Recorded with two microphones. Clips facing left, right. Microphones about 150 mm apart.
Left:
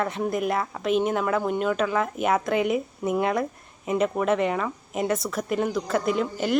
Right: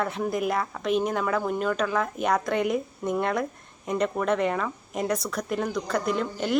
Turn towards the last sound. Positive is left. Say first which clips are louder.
# left 2 dB
turn(degrees=0)  # may be behind; listen again after turning